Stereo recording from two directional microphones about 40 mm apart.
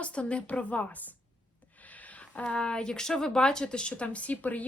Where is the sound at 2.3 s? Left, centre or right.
Left.